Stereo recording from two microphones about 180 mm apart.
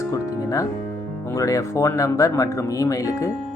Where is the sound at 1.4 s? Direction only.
20° left (ahead or behind).